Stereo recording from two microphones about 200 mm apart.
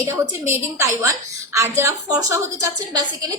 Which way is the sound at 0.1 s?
15° right (ahead or behind).